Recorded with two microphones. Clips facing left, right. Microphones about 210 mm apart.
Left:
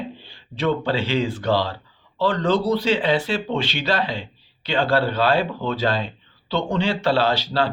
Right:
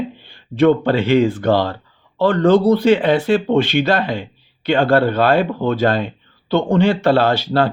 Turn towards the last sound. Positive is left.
turn(degrees=-50)  # may be behind; listen again after turning